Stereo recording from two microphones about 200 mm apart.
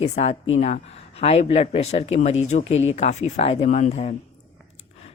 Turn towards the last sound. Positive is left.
turn(degrees=35)  # may be behind; listen again after turning